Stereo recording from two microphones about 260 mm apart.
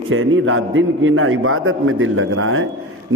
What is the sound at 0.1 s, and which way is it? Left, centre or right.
A man's voice, right.